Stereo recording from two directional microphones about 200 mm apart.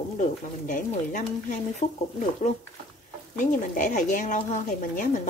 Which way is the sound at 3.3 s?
40° left (ahead or behind).